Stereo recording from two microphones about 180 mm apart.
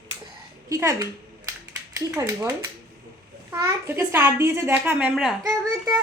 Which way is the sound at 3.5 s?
15° right (ahead or behind).